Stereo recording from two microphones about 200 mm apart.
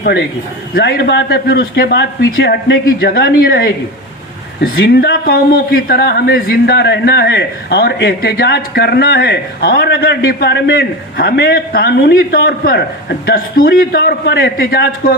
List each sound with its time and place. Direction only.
0.0 s a man's voice: 60° left (ahead or behind)